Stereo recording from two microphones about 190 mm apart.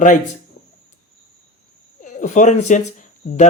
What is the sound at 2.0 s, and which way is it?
Speech, 40° left (ahead or behind).